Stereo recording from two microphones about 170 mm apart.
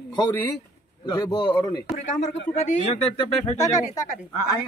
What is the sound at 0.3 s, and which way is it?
Speech, 10° left (ahead or behind).